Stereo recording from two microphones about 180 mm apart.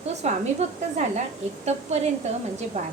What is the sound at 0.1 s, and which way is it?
Speech, 40° right (ahead or behind).